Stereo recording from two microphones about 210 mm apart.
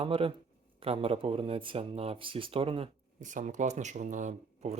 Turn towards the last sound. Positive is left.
turn(degrees=-35)  # may be behind; listen again after turning